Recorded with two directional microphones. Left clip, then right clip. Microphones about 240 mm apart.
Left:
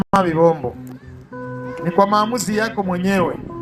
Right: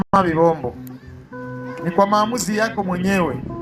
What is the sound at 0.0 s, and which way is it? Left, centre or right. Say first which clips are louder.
Speech: left 1 dB; left.